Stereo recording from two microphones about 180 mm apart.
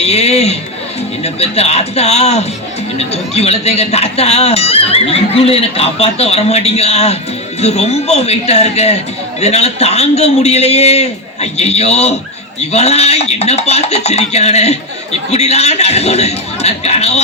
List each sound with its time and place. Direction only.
0.0 s a man's voice: 35° left (ahead or behind)